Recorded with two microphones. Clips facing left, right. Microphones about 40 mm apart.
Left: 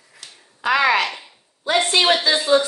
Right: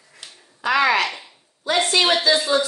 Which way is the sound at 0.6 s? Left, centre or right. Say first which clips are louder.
Left 1 dB; left.